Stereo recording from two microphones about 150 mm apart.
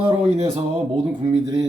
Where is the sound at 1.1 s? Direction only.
25° right (ahead or behind).